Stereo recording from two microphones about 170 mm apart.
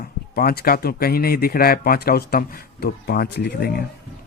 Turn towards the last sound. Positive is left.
turn(degrees=65)  # may be behind; listen again after turning